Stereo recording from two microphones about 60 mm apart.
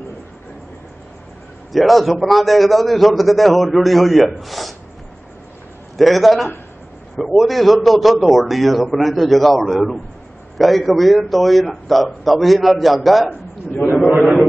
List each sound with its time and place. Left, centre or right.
1.7 s a man's voice: centre
5.9 s a man's voice: centre
13.3 s a man's voice: left